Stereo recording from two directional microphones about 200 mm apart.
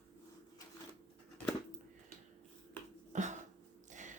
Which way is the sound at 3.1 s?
40° right (ahead or behind).